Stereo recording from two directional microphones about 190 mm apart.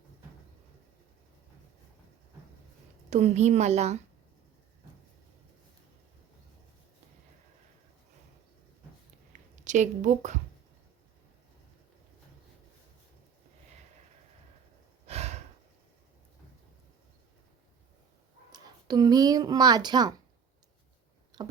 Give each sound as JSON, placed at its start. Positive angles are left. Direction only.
{"t": 3.1, "sound": "a woman's voice", "side_deg": -35}
{"t": 9.3, "sound": "a sound", "side_deg": -40}
{"t": 15.0, "sound": "breathing", "side_deg": -35}
{"t": 18.5, "sound": "speech", "side_deg": -20}